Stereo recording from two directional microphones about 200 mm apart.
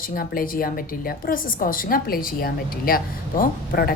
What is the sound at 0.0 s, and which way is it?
A woman's voice, 45° left (ahead or behind).